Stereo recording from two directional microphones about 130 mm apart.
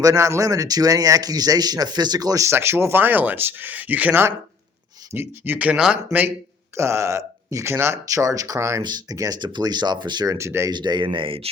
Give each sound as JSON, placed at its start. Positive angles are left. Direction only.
{"t": 0.0, "sound": "a man's voice", "side_deg": -25}
{"t": 6.7, "sound": "a man's voice", "side_deg": -20}
{"t": 10.7, "sound": "speech", "side_deg": -35}